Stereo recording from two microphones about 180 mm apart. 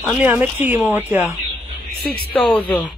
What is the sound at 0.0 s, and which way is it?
Speech, 5° right (ahead or behind).